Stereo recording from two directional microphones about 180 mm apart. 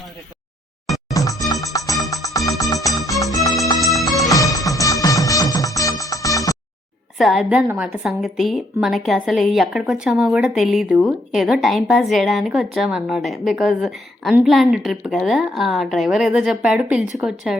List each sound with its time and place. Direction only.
1.1 s music: 20° left (ahead or behind)
3.8 s music: centre (ahead or behind)
4.5 s music: 20° left (ahead or behind)
7.2 s a woman's voice: centre (ahead or behind)